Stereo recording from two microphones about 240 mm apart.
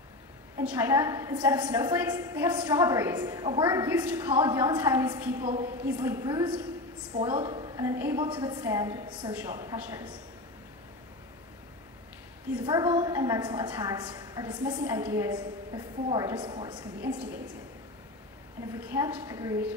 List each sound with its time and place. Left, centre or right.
0.6 s a woman's voice: centre
12.6 s a woman's voice: centre
18.8 s a woman's voice: centre